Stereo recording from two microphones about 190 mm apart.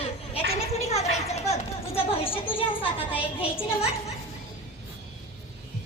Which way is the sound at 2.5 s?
25° left (ahead or behind).